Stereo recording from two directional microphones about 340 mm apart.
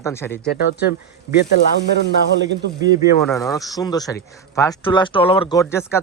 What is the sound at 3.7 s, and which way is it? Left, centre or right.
Speech, centre.